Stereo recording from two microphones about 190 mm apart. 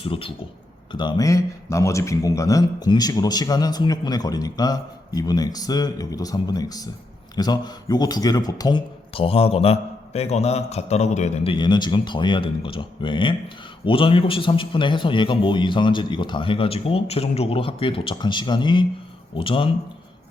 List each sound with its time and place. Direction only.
0.0 s a man's voice: 30° left (ahead or behind)